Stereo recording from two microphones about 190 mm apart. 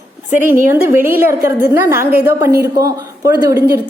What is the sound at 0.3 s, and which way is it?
A woman's voice, 15° right (ahead or behind).